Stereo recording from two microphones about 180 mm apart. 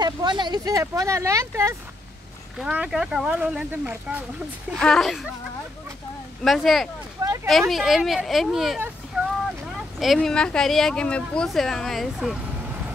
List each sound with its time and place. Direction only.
0.0 s speech: 25° right (ahead or behind)
2.6 s speech: 5° right (ahead or behind)
4.7 s speech: 5° left (ahead or behind)
6.4 s speech: centre (ahead or behind)
9.1 s vehicle: 5° right (ahead or behind)
9.9 s speech: centre (ahead or behind)